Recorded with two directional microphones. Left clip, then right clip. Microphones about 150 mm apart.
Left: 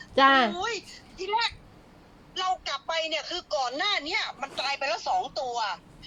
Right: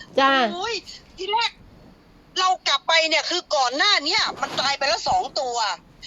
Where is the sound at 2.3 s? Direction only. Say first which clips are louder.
Right 9 dB; 40° right (ahead or behind).